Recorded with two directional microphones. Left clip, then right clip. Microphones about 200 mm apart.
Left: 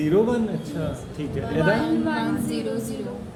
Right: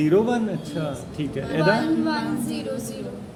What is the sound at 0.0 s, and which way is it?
Speech, 45° right (ahead or behind).